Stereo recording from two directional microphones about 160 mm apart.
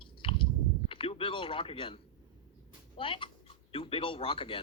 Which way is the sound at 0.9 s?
35° left (ahead or behind).